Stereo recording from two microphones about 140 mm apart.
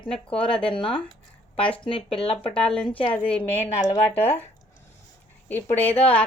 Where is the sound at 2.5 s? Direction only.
10° left (ahead or behind).